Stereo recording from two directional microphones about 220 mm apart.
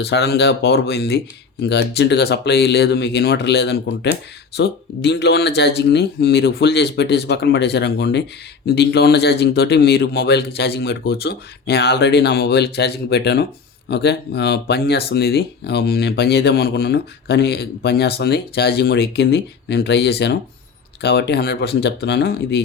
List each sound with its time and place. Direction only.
0.0 s speech: 50° left (ahead or behind)